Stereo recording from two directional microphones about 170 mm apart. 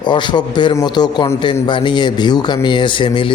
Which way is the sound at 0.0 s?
25° left (ahead or behind).